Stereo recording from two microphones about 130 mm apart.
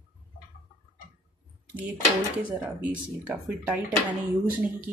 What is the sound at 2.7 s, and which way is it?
Speech, 10° right (ahead or behind).